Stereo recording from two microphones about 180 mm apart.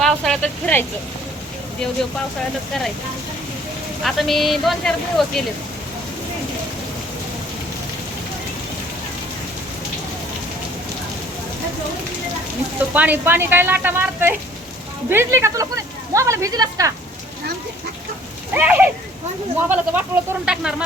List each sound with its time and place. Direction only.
0.0 s a sound: 5° left (ahead or behind)
4.0 s speech: centre (ahead or behind)
12.9 s speech: 10° right (ahead or behind)
18.5 s speech: 10° right (ahead or behind)